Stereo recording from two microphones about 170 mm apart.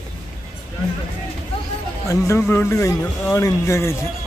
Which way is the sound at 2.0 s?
15° left (ahead or behind).